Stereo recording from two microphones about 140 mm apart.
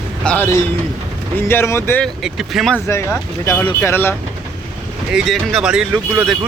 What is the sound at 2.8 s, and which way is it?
Speech, 20° left (ahead or behind).